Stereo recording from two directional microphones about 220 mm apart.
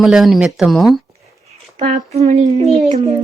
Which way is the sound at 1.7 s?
30° right (ahead or behind).